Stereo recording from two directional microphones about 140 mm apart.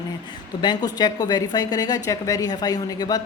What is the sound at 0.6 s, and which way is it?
Speech, 30° left (ahead or behind).